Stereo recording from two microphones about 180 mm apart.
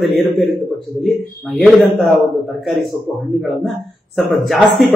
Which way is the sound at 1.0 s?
Centre (ahead or behind).